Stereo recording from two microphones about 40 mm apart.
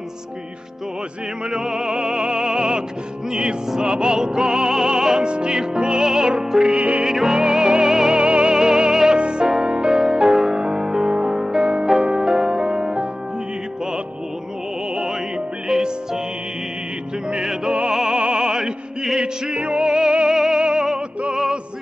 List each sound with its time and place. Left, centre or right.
1.5 s music: centre
3.3 s opera: right
7.1 s music: centre
7.3 s music: centre
8.2 s music: right
15.0 s music: centre
17.6 s music: right
19.2 s music: right